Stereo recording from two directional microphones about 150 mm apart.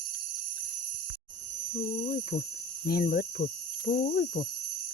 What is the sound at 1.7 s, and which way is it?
Speech, 65° left (ahead or behind).